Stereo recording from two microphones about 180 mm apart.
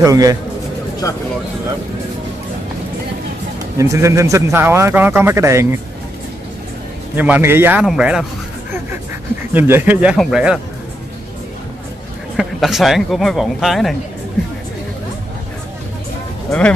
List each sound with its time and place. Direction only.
0.0 s a man's voice: 20° right (ahead or behind)
3.7 s a man's voice: 15° right (ahead or behind)
7.2 s a man's voice: 10° right (ahead or behind)
9.5 s a man's voice: 10° right (ahead or behind)
12.4 s speech: centre (ahead or behind)